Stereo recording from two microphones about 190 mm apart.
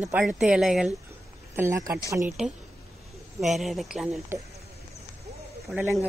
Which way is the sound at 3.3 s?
Centre (ahead or behind).